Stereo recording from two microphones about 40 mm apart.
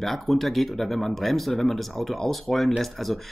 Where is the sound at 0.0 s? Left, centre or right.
Centre.